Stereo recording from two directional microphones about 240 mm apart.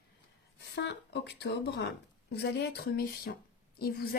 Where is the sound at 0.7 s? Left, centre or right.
Left.